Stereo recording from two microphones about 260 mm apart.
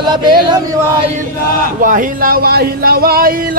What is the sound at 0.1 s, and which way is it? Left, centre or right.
Chant, centre.